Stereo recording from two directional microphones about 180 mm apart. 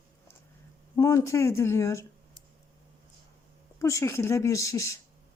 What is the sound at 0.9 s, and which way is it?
Speech, 20° left (ahead or behind).